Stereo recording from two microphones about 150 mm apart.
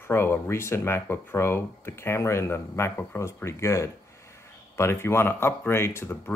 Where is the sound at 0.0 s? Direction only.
15° left (ahead or behind).